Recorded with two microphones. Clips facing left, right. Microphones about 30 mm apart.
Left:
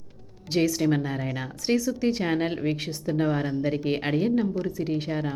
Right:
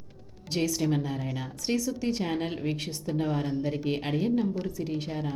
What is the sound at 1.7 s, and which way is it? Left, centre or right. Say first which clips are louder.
Speech: left 4 dB; centre.